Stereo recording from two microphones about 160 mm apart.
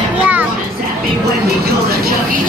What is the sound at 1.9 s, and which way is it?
Speech, 75° right (ahead or behind).